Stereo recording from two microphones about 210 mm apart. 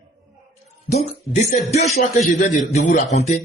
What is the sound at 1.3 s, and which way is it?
Speech, 30° left (ahead or behind).